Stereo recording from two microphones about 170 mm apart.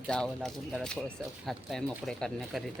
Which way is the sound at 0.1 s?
5° left (ahead or behind).